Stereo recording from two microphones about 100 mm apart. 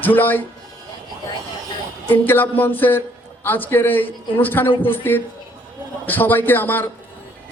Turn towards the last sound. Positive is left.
turn(degrees=20)  # may be behind; listen again after turning